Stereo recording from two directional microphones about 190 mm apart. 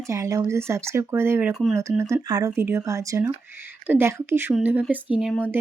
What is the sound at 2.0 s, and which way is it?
Speech, 15° right (ahead or behind).